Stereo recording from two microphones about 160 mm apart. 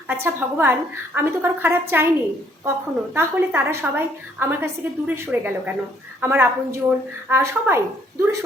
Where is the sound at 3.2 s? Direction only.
15° right (ahead or behind).